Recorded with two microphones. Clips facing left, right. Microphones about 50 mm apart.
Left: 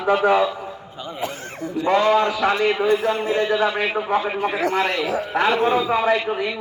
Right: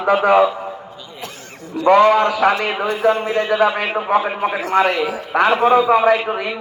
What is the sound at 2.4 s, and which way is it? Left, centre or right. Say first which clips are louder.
Speech: right 4 dB; centre.